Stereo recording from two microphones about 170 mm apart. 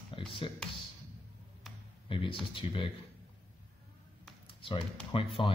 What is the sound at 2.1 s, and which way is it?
Speech, 30° left (ahead or behind).